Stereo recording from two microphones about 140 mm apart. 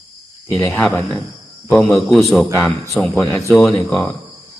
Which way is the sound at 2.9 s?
10° left (ahead or behind).